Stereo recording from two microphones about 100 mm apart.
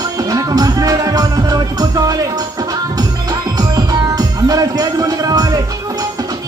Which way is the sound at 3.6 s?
40° right (ahead or behind).